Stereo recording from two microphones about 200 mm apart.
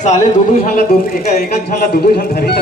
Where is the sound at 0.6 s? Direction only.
45° left (ahead or behind).